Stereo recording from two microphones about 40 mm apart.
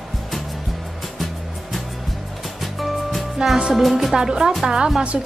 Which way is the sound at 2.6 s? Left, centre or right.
Centre.